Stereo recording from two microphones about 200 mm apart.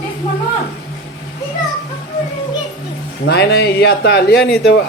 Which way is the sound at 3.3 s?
55° left (ahead or behind).